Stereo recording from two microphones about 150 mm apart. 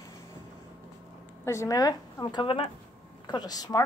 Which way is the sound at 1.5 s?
20° left (ahead or behind).